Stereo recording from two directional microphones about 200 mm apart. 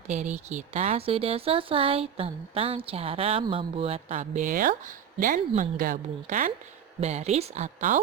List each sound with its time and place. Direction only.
0.1 s speech: 35° right (ahead or behind)